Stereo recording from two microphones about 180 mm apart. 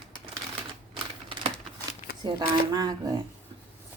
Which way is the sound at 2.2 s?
25° right (ahead or behind).